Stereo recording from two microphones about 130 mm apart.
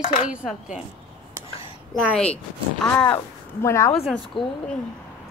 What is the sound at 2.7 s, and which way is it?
Speech, 5° left (ahead or behind).